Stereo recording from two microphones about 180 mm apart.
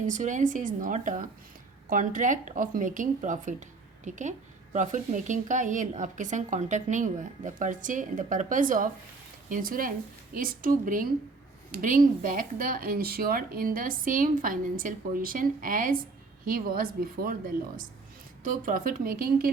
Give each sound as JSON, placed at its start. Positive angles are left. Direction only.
{"t": 0.0, "sound": "a woman's voice", "side_deg": -45}
{"t": 18.4, "sound": "a woman's voice", "side_deg": -50}